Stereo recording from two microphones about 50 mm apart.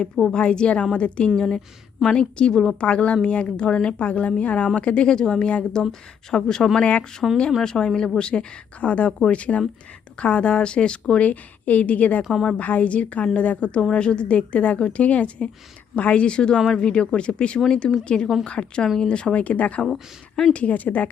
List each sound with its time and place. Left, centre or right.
0.0 s speech: centre
0.3 s speech: centre
1.4 s speech: centre
7.2 s speech: centre
7.6 s speech: centre
11.1 s speech: left
19.9 s speech: centre
20.5 s speech: left